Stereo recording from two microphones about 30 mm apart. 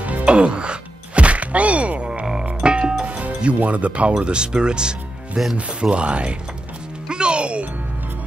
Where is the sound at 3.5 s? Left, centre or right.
Right.